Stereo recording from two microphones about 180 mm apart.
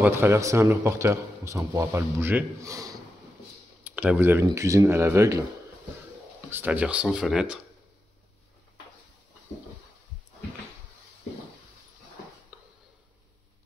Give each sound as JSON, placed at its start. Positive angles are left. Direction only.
{"t": 0.0, "sound": "speech", "side_deg": -15}
{"t": 3.9, "sound": "speech", "side_deg": -10}
{"t": 6.5, "sound": "speech", "side_deg": -10}